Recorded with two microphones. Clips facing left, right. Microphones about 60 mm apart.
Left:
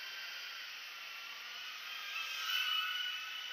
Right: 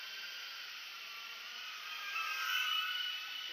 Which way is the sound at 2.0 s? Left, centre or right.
Right.